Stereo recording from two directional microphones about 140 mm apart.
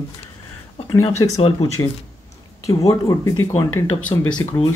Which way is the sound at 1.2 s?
25° left (ahead or behind).